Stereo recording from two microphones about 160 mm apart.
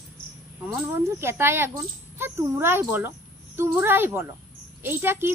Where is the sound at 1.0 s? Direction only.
15° right (ahead or behind).